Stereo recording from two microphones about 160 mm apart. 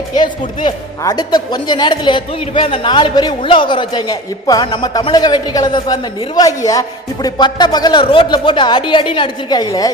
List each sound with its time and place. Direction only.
0.1 s speech: 25° left (ahead or behind)